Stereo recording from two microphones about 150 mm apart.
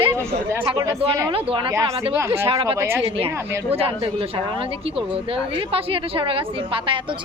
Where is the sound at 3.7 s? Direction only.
40° right (ahead or behind).